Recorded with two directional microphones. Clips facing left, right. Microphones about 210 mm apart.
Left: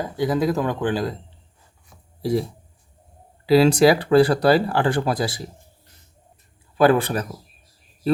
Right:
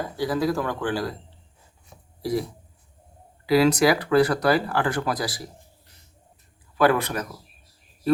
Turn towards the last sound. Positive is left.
turn(degrees=30)  # may be behind; listen again after turning